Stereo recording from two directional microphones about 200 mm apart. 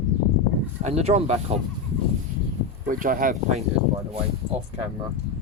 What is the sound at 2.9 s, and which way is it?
Speech, 45° right (ahead or behind).